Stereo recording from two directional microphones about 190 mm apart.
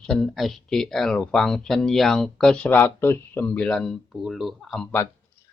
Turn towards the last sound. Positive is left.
turn(degrees=5)  # may be behind; listen again after turning